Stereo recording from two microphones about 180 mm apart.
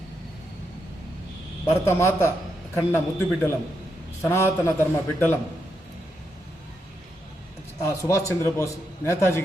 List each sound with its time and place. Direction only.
1.7 s a man's voice: 15° left (ahead or behind)
7.8 s a man's voice: 15° left (ahead or behind)